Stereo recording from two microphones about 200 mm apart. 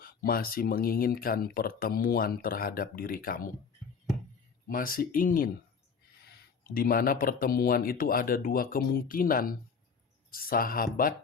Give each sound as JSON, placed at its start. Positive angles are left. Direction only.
{"t": 0.0, "sound": "speech", "side_deg": 50}
{"t": 4.7, "sound": "speech", "side_deg": 45}